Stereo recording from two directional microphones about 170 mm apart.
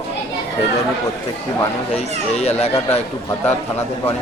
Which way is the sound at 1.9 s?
40° left (ahead or behind).